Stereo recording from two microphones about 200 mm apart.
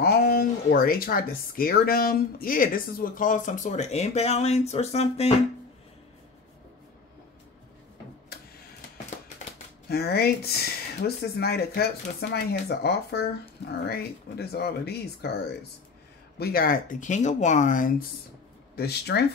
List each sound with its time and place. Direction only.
0.0 s speech: 50° left (ahead or behind); by 5.3 s 30° left (ahead or behind)
9.8 s speech: 50° left (ahead or behind)
18.8 s speech: 55° left (ahead or behind)